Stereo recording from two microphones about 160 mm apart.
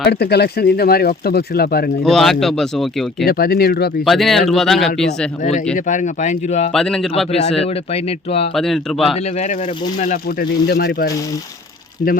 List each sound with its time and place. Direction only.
0.0 s speech: 90° left; by 1.9 s 75° left (ahead or behind)
2.0 s speech: centre (ahead or behind)
3.2 s speech: 70° left (ahead or behind)
4.0 s speech: centre (ahead or behind)
5.4 s speech: 50° left (ahead or behind)
6.7 s speech: 5° left (ahead or behind)
7.3 s speech: 45° left (ahead or behind)
8.5 s speech: centre (ahead or behind)
9.1 s speech: 45° left (ahead or behind)
10.2 s speech: 80° left